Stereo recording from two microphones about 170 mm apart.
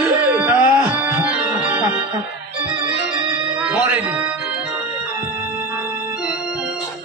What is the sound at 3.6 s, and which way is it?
Music, 10° right (ahead or behind).